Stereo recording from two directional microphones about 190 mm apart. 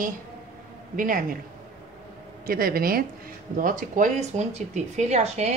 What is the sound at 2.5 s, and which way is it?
A woman's voice, 50° right (ahead or behind).